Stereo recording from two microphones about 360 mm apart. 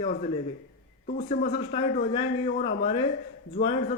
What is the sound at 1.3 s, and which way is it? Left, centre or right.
A man's voice, centre.